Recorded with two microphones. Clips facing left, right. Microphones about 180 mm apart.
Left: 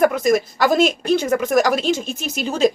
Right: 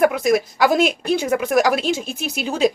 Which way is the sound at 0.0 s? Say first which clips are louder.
Even; 10° right (ahead or behind).